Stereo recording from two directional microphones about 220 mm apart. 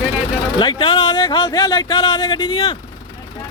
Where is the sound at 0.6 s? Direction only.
20° left (ahead or behind).